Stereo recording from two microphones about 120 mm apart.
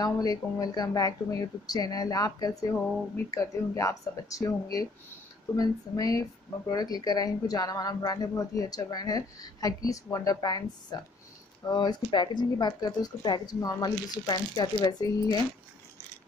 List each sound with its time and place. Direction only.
0.0 s speech: 30° left (ahead or behind)